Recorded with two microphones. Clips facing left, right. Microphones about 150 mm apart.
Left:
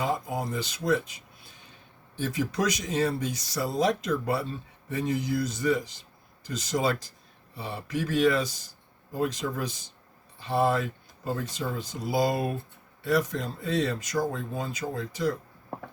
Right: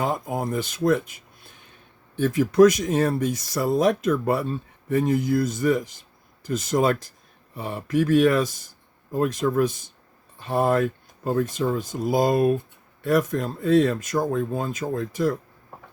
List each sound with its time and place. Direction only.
0.0 s speech: 50° right (ahead or behind)